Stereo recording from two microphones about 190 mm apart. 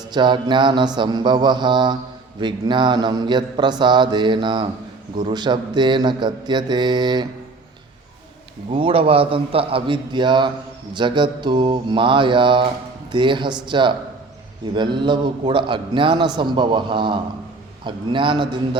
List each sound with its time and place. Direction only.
0.1 s a man's voice: 25° right (ahead or behind)
8.7 s a man's voice: 30° right (ahead or behind)